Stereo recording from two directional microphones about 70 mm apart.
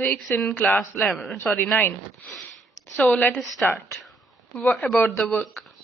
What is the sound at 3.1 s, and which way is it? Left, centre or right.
Speech, centre.